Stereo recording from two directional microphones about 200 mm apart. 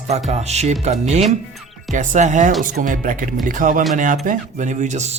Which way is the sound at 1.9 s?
40° right (ahead or behind).